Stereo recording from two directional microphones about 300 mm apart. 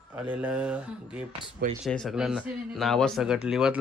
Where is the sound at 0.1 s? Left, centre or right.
Centre.